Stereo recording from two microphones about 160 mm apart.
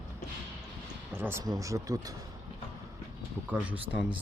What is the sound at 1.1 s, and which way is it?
Speech, 15° right (ahead or behind).